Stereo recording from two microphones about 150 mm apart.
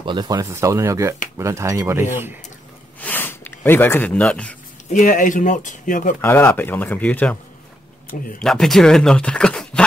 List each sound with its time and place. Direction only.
0.0 s speech: 30° right (ahead or behind)
3.0 s a sound: 10° left (ahead or behind)
4.9 s speech: 60° left (ahead or behind)
6.2 s speech: 15° left (ahead or behind)
8.4 s speech: centre (ahead or behind)